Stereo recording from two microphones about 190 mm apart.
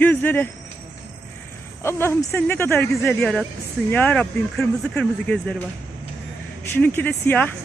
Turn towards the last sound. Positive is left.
turn(degrees=10)  # may be behind; listen again after turning